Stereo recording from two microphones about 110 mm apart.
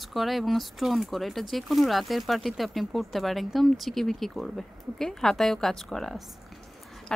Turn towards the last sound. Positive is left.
turn(degrees=5)  # may be behind; listen again after turning